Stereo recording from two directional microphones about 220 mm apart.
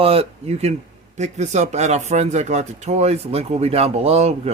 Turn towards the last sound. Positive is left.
turn(degrees=-30)  # may be behind; listen again after turning